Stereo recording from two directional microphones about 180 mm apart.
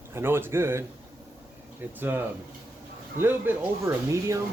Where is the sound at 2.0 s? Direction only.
10° right (ahead or behind).